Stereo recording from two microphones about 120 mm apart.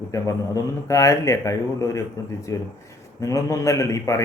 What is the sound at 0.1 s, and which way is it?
Speech, 25° left (ahead or behind).